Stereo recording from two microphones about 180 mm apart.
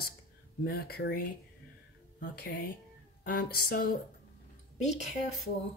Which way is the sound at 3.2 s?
55° left (ahead or behind).